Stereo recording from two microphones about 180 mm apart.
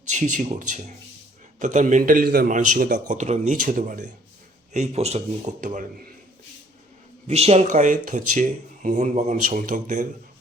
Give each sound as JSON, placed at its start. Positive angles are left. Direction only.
{"t": 0.1, "sound": "speech", "side_deg": -45}
{"t": 7.3, "sound": "speech", "side_deg": -35}